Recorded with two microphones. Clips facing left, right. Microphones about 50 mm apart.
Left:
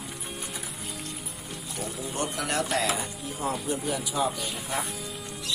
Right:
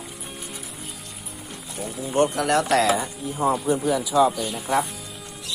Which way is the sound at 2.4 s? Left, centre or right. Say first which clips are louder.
Right 8 dB; right.